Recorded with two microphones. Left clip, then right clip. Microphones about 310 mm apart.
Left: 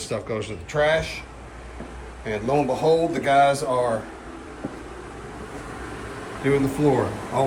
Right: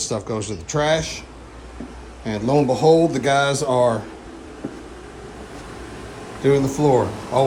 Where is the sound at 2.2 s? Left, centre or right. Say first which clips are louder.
Right 3 dB; centre.